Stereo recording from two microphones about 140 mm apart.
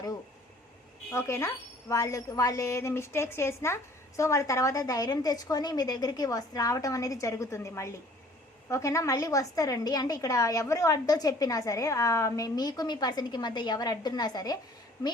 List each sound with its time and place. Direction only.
1.1 s a woman's voice: 20° left (ahead or behind)